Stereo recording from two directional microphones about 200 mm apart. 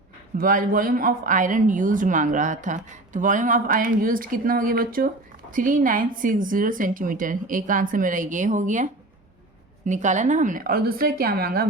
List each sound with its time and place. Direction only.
0.3 s speech: 45° right (ahead or behind)